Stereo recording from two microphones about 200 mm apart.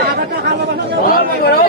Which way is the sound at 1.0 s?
45° left (ahead or behind).